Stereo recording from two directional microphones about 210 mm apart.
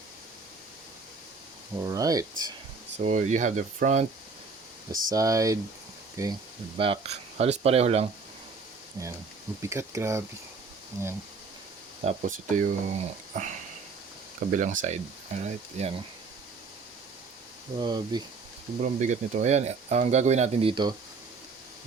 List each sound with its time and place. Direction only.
1.7 s speech: 15° right (ahead or behind)
3.0 s speech: 35° right (ahead or behind)
5.1 s speech: 15° right (ahead or behind)
6.7 s speech: 25° right (ahead or behind)
9.6 s speech: 15° right (ahead or behind)
12.0 s speech: 35° right (ahead or behind)
17.7 s speech: 20° right (ahead or behind)
18.8 s speech: 35° right (ahead or behind)